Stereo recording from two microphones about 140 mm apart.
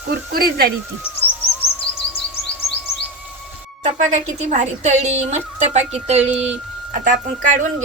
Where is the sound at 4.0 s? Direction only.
55° right (ahead or behind).